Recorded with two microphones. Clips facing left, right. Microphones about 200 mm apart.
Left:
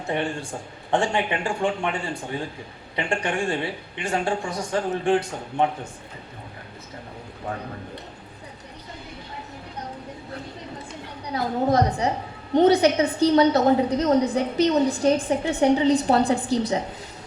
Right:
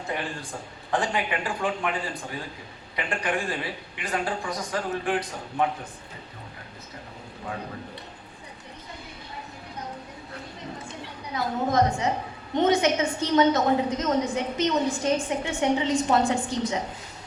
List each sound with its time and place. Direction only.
0.1 s a woman's voice: 25° left (ahead or behind)
11.3 s a woman's voice: 35° left (ahead or behind)